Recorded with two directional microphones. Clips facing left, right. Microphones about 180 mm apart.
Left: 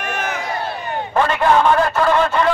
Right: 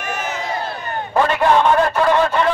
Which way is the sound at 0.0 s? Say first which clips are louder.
Left 1 dB; 60° left (ahead or behind).